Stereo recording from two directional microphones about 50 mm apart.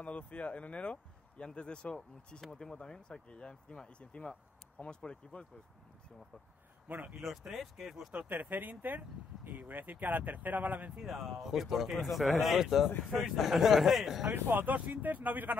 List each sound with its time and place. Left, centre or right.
0.0 s speech: left
7.2 s speech: centre
8.3 s speech: right
11.0 s speech: centre
14.3 s speech: right